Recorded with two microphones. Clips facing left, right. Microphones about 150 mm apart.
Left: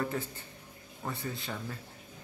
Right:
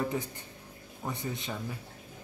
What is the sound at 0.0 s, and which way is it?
Speech, 15° right (ahead or behind).